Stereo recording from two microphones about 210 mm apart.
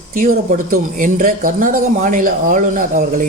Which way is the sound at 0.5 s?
40° right (ahead or behind).